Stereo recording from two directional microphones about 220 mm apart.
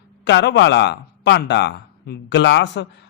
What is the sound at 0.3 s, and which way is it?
Speech, 50° left (ahead or behind).